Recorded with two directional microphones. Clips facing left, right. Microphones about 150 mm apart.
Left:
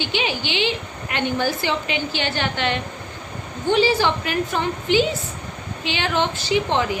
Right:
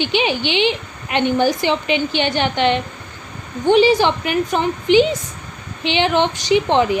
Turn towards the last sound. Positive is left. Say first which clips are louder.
# right 5 dB
turn(degrees=-20)  # may be behind; listen again after turning